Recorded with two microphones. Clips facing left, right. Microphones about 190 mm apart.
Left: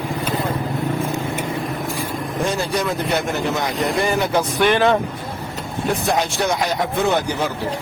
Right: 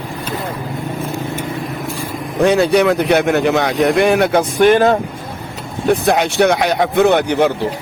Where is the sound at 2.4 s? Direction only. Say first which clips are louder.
Right 11 dB; 70° right (ahead or behind).